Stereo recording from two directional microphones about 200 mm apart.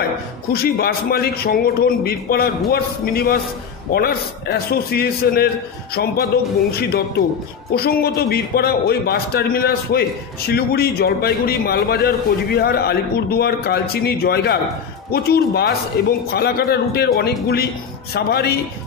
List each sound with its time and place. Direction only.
0.5 s a man's voice: 50° left (ahead or behind)